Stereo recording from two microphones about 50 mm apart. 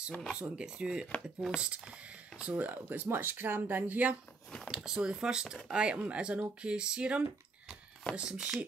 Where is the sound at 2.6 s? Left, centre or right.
Right.